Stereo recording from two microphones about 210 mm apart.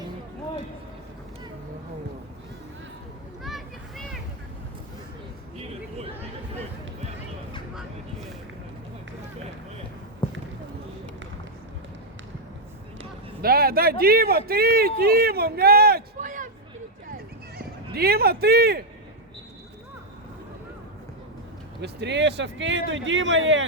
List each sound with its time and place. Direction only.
3.4 s children playing: centre (ahead or behind)
13.4 s speech: 45° right (ahead or behind)
17.6 s speech: 45° right (ahead or behind)
21.8 s speech: 55° right (ahead or behind)